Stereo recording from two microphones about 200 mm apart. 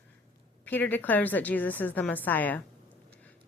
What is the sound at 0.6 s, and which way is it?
A woman's voice, 10° left (ahead or behind).